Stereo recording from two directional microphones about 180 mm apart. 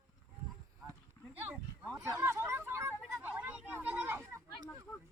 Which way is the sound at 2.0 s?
15° right (ahead or behind).